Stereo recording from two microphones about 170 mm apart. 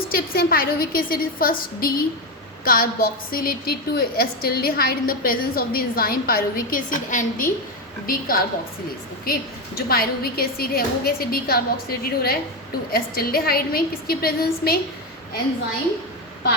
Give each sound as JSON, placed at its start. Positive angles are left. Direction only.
{"t": 0.1, "sound": "a woman's voice", "side_deg": 60}